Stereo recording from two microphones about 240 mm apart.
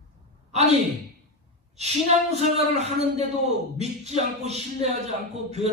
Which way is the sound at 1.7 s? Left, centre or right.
Right.